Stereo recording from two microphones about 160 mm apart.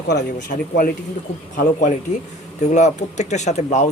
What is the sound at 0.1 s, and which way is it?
Speech, 90° left.